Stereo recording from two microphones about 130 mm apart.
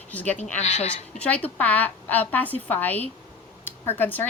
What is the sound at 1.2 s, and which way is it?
A woman's voice, 10° left (ahead or behind).